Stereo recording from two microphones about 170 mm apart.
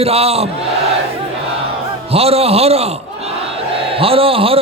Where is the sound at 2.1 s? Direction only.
35° right (ahead or behind).